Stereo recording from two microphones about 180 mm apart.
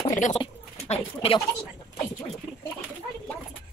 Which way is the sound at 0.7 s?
35° left (ahead or behind).